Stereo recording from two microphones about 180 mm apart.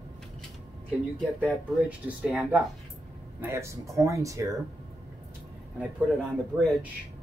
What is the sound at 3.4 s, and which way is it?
Speech, 15° right (ahead or behind).